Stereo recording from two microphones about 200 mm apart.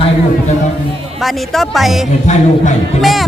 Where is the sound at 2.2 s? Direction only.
35° left (ahead or behind).